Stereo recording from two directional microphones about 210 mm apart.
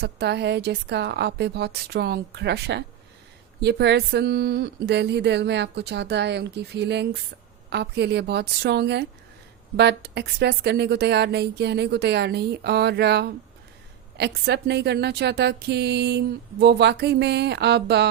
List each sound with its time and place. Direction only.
0.0 s a woman's voice: 50° right (ahead or behind)